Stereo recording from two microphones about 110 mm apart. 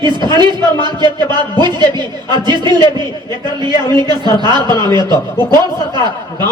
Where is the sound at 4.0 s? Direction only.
40° right (ahead or behind).